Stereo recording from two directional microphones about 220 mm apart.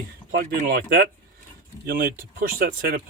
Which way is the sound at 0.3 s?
45° right (ahead or behind).